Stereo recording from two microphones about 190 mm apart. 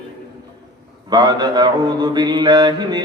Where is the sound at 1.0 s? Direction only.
20° right (ahead or behind).